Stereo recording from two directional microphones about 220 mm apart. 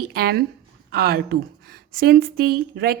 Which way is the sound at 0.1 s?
45° right (ahead or behind).